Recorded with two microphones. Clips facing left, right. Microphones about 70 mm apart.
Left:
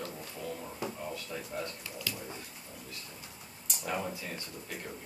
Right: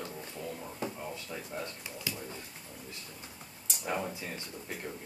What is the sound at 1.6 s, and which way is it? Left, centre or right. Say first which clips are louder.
Speech: left 1 dB; centre.